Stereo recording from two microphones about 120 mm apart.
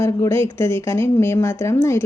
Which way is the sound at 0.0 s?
20° left (ahead or behind).